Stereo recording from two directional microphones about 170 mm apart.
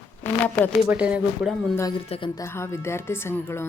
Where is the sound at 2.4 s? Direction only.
15° left (ahead or behind).